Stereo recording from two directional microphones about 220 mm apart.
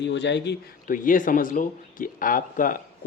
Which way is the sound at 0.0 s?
50° left (ahead or behind).